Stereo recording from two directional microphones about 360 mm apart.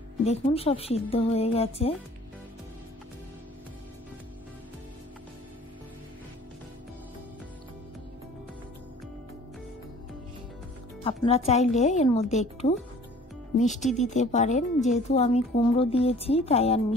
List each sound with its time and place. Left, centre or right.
0.2 s a woman's voice: centre
11.1 s a woman's voice: centre